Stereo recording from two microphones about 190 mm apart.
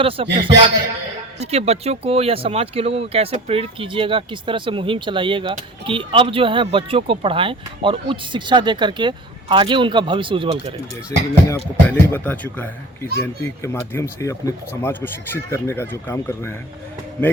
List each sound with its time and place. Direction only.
0.0 s speech: 30° right (ahead or behind)
11.4 s speech: 15° left (ahead or behind)